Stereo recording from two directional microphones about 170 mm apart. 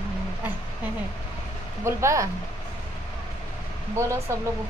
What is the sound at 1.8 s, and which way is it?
Speech, 15° right (ahead or behind).